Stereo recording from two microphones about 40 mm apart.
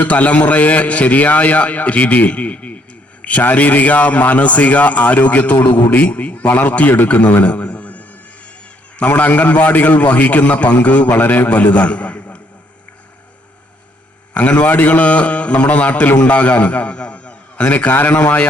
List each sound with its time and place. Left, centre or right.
0.0 s a man's voice: left
7.4 s a sound: left
9.0 s a man's voice: left
11.1 s a man's voice: left
11.4 s a man's voice: left
14.3 s a man's voice: left